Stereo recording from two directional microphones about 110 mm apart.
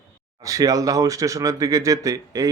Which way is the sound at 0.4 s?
30° right (ahead or behind).